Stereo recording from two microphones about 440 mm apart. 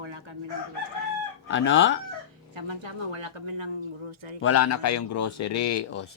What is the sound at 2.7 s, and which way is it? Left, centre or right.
Speech, right.